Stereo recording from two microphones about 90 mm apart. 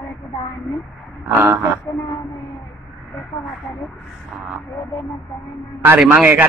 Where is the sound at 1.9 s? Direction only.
35° left (ahead or behind).